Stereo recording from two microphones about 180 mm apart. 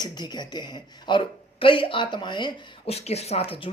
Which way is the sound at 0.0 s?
25° left (ahead or behind).